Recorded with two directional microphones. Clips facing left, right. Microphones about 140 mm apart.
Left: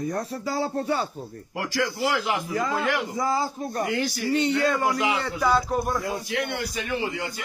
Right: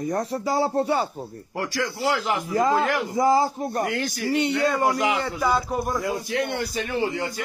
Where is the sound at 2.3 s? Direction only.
35° right (ahead or behind).